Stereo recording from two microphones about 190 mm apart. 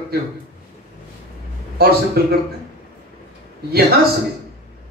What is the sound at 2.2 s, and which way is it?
Speech, 55° right (ahead or behind).